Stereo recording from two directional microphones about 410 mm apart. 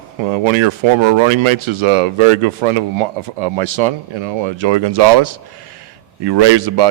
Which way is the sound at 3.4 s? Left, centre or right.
Right.